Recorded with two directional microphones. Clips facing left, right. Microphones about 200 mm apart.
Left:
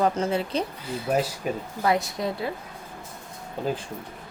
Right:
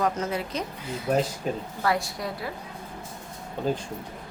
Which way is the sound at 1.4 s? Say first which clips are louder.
Left 1 dB; 10° left (ahead or behind).